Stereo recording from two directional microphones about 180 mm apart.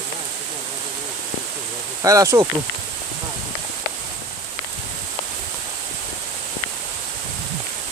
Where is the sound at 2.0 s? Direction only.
20° right (ahead or behind).